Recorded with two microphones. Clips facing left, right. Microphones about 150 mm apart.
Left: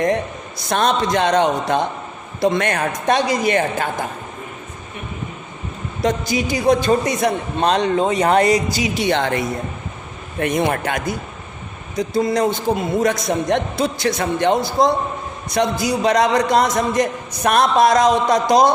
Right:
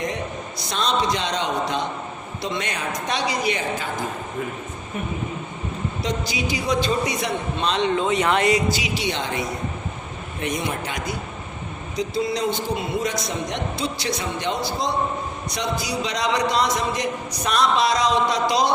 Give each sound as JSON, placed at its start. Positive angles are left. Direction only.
{"t": 0.7, "sound": "a man's voice", "side_deg": 50}
{"t": 6.0, "sound": "a man's voice", "side_deg": 50}
{"t": 10.4, "sound": "a man's voice", "side_deg": 60}